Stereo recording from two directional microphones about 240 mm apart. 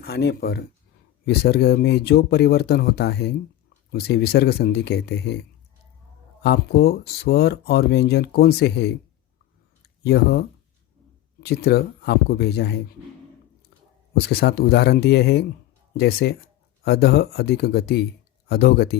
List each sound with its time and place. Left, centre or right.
0.0 s speech: left
10.0 s speech: left
14.1 s speech: left